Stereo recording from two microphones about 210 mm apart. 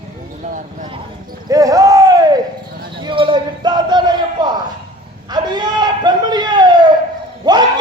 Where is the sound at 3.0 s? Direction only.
25° right (ahead or behind).